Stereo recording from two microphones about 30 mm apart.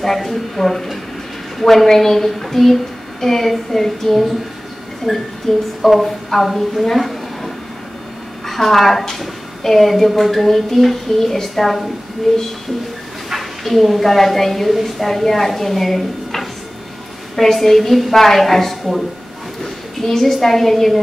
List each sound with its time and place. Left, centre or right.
0.0 s a woman's voice: centre
5.5 s a woman's voice: centre